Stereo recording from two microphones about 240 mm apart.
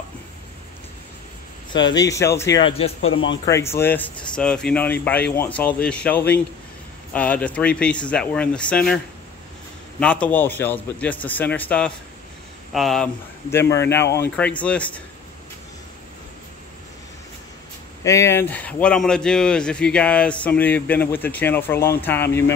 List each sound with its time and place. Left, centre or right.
2.0 s a man's voice: centre
3.0 s speech: left
3.4 s a man's voice: centre
18.0 s a man's voice: centre